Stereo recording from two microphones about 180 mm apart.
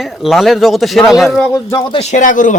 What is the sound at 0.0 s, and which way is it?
Speech, centre (ahead or behind).